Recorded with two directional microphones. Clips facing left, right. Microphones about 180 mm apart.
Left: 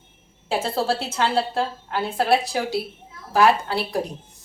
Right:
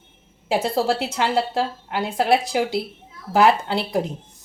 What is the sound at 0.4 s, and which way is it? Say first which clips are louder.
A woman's voice: right 3 dB; 20° right (ahead or behind).